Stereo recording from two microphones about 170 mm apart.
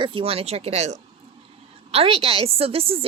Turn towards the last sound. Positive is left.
turn(degrees=-35)  # may be behind; listen again after turning